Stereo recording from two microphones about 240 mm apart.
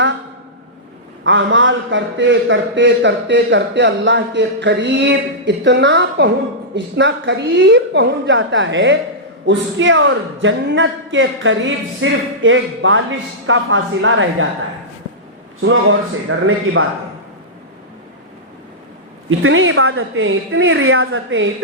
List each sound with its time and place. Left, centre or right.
1.2 s a man's voice: right
15.6 s a woman's voice: right
19.4 s a woman's voice: right